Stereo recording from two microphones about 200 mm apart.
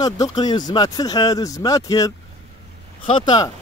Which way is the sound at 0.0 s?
20° left (ahead or behind).